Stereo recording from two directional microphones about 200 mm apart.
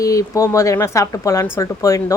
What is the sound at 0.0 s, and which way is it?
Speech, 15° left (ahead or behind).